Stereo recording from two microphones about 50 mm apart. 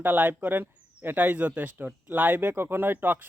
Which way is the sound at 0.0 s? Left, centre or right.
Right.